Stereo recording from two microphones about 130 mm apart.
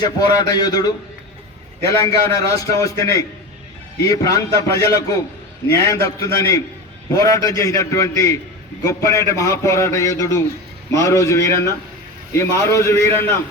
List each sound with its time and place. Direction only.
0.0 s a man's voice: 30° left (ahead or behind)
1.9 s a man's voice: 25° left (ahead or behind)